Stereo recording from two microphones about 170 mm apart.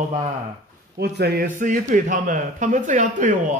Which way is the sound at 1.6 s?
50° right (ahead or behind).